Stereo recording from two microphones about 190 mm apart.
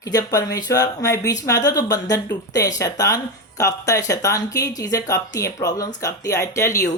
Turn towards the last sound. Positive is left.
turn(degrees=15)  # may be behind; listen again after turning